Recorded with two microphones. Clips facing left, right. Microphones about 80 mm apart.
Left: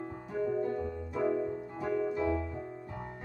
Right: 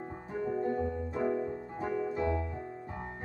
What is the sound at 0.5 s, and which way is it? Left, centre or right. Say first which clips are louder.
Piano: right 3 dB; right.